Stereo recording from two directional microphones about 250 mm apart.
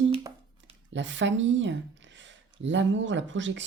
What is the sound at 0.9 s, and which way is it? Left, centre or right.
Speech, right.